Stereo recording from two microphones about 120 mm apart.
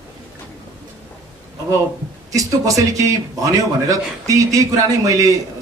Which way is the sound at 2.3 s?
30° right (ahead or behind).